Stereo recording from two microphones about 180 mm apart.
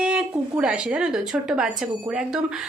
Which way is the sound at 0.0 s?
5° right (ahead or behind).